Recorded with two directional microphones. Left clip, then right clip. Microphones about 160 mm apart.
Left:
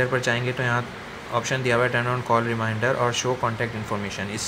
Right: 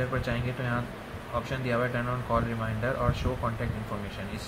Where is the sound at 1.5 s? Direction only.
90° left; by 3.1 s 70° left (ahead or behind).